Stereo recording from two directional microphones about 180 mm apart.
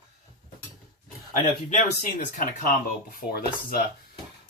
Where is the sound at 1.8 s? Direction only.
50° left (ahead or behind).